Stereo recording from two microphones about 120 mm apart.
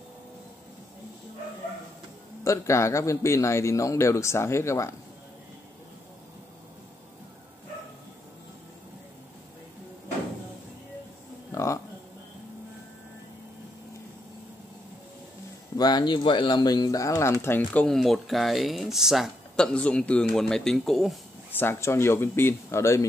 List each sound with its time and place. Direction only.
2.4 s speech: 25° left (ahead or behind)
11.5 s a sound: 25° left (ahead or behind)
15.8 s speech: 35° left (ahead or behind); by 21.2 s centre (ahead or behind)
21.5 s speech: 15° left (ahead or behind)